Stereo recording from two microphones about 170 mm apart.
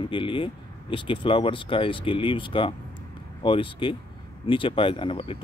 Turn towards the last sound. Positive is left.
turn(degrees=30)  # may be behind; listen again after turning